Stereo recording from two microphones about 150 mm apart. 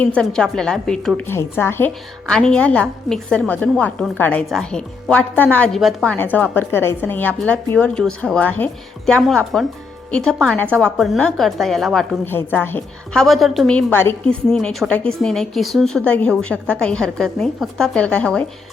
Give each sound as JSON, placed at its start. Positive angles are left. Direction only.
{"t": 0.0, "sound": "a woman's voice", "side_deg": 5}
{"t": 1.3, "sound": "a woman's voice", "side_deg": 15}
{"t": 6.1, "sound": "a woman's voice", "side_deg": 10}
{"t": 12.2, "sound": "a woman's voice", "side_deg": 15}
{"t": 13.2, "sound": "a woman's voice", "side_deg": 0}
{"t": 14.5, "sound": "a woman's voice", "side_deg": 0}